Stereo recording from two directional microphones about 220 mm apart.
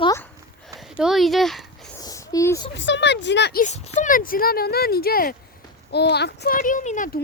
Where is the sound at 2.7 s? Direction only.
55° left (ahead or behind).